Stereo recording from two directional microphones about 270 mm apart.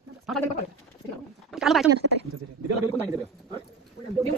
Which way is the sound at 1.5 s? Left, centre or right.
Centre.